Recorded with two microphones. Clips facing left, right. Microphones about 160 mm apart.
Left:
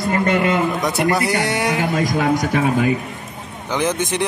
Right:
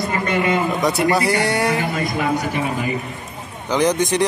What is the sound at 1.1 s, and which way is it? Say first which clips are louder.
Speech: right 1 dB; 20° right (ahead or behind).